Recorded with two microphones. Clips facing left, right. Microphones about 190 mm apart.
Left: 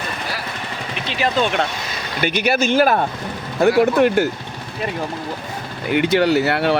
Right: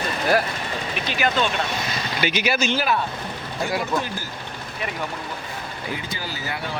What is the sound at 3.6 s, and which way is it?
Speech, 65° left (ahead or behind).